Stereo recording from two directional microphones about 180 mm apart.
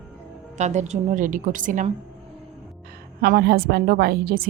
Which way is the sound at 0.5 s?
40° right (ahead or behind).